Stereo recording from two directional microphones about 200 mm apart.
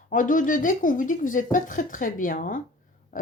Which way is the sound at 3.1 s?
40° left (ahead or behind).